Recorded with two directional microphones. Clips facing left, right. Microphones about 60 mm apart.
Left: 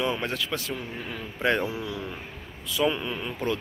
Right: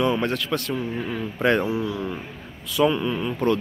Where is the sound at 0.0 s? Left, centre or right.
Centre.